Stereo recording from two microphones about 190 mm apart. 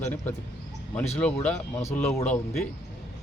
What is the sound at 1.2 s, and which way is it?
Speech, 5° left (ahead or behind).